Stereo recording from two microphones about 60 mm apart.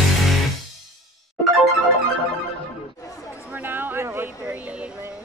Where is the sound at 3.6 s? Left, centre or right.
Right.